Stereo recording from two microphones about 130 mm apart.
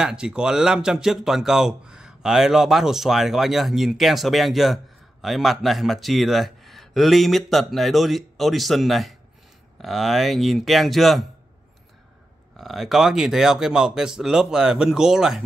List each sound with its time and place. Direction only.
0.0 s speech: 5° right (ahead or behind)
12.5 s speech: centre (ahead or behind)